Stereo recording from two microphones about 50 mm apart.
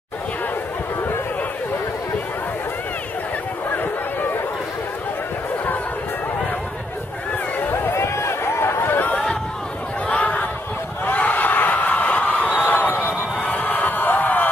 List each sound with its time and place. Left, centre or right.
7.7 s chatter: left
10.0 s a sound: left
13.6 s music: left